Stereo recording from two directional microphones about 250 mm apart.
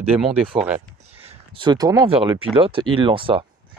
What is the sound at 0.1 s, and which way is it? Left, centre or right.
Speech, centre.